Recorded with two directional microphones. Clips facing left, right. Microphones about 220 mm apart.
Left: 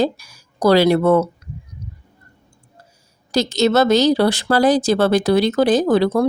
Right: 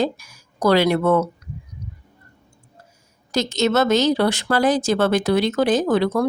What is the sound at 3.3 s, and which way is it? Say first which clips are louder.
A woman's voice: left 3 dB; 35° left (ahead or behind).